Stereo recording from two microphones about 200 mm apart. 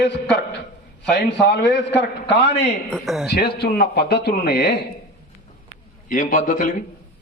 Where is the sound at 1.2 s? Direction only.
60° left (ahead or behind).